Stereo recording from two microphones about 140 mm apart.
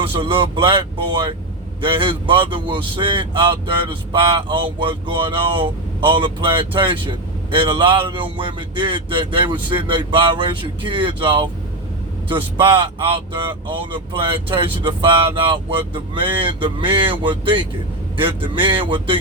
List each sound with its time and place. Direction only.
0.0 s speech: 40° right (ahead or behind)